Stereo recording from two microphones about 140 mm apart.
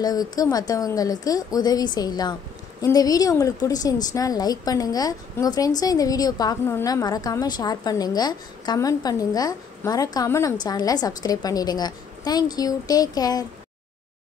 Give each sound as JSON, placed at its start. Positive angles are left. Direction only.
{"t": 0.0, "sound": "a woman's voice", "side_deg": 25}